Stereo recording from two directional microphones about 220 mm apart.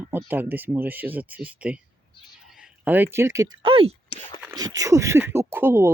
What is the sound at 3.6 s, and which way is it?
Speech, 25° right (ahead or behind).